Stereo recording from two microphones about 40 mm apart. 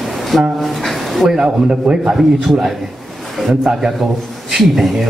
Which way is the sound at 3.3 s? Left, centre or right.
Centre.